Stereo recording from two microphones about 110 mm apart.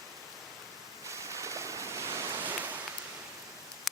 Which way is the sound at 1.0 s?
25° right (ahead or behind).